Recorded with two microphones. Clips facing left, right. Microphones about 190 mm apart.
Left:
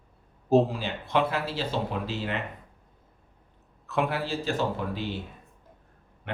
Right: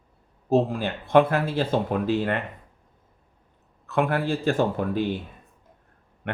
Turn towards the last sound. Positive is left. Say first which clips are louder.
# right 6 dB
turn(degrees=-55)  # may be behind; listen again after turning